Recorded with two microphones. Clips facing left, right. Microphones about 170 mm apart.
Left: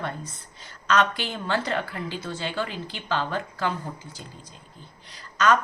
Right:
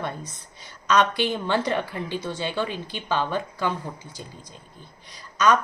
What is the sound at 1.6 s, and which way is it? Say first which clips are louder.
A woman's voice: right 2 dB; 15° right (ahead or behind).